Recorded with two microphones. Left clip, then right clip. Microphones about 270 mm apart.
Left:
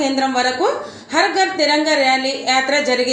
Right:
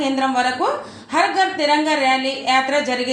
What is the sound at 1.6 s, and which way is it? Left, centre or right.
A woman's voice, right.